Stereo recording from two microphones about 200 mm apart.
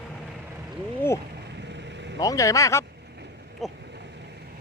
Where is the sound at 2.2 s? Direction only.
15° left (ahead or behind).